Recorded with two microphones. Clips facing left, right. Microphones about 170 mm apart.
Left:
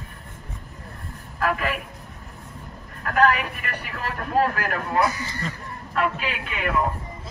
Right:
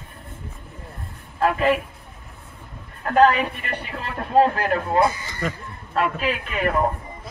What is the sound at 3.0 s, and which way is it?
A man's voice, 30° right (ahead or behind).